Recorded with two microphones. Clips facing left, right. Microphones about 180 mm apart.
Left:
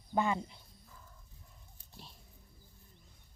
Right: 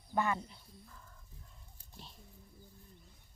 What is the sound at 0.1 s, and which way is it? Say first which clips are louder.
Speech: left 2 dB; 15° left (ahead or behind).